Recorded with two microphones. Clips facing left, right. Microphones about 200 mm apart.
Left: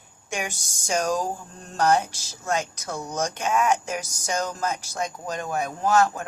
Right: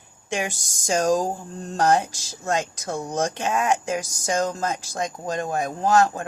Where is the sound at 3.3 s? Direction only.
35° right (ahead or behind).